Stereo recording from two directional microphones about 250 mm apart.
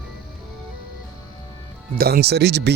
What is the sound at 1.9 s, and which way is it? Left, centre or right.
Speech, right.